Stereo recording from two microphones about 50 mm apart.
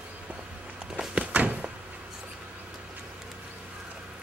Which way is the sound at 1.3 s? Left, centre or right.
Right.